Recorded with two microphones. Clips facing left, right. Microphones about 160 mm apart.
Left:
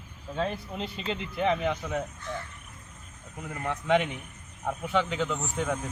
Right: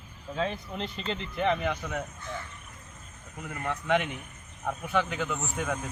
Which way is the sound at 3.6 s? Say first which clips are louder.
Left 2 dB; 10° left (ahead or behind).